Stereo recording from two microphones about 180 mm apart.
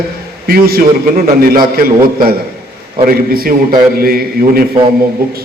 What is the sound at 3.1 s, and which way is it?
A man's voice, 55° right (ahead or behind).